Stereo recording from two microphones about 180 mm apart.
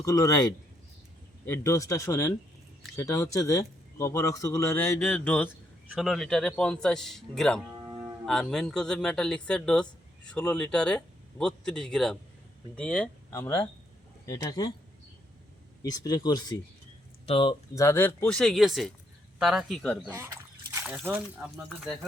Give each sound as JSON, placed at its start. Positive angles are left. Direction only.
{"t": 0.0, "sound": "speech", "side_deg": 20}
{"t": 15.8, "sound": "speech", "side_deg": 20}
{"t": 17.8, "sound": "speech", "side_deg": 10}
{"t": 20.1, "sound": "a sound", "side_deg": -10}
{"t": 20.8, "sound": "speech", "side_deg": -5}